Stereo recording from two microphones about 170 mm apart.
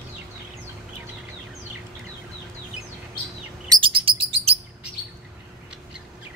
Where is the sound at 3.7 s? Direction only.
30° right (ahead or behind).